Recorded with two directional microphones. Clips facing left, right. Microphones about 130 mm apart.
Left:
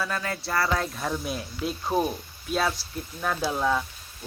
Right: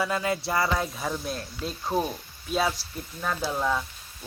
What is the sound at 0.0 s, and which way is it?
Speech, 20° right (ahead or behind).